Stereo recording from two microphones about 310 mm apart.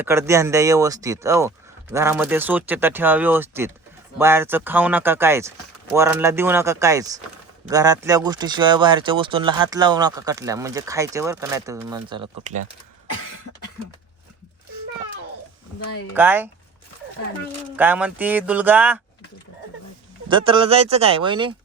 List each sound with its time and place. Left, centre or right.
0.0 s speech: centre
16.1 s speech: centre
17.7 s speech: centre
20.2 s speech: centre